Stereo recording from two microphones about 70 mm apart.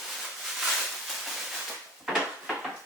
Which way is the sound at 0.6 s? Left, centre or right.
Centre.